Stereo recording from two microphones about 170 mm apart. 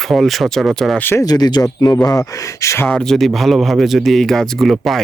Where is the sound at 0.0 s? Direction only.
Centre (ahead or behind); by 2.8 s 15° left (ahead or behind).